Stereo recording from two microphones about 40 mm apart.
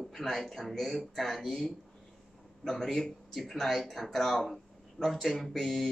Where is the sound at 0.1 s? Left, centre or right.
Centre.